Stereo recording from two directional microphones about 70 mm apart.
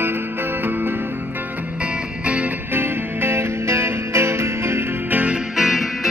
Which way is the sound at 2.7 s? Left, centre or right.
Right.